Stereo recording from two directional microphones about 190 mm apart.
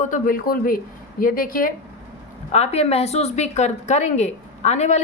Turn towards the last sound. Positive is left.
turn(degrees=35)  # may be behind; listen again after turning